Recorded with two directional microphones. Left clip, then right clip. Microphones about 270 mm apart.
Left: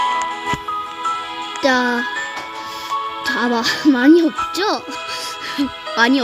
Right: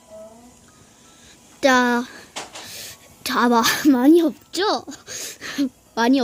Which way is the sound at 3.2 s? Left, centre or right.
Centre.